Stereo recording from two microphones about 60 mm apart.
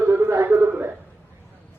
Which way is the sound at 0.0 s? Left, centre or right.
Right.